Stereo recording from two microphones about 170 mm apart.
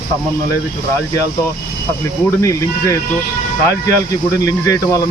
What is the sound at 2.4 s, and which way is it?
Speech, 20° left (ahead or behind).